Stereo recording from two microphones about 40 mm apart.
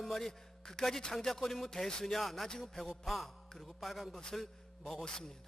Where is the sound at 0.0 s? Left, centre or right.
Centre.